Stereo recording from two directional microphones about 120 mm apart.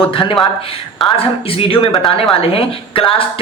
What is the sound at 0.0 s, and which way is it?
Speech, 45° left (ahead or behind).